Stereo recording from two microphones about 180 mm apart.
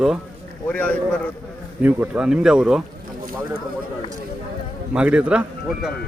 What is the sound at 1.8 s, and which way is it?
Speech, 10° right (ahead or behind).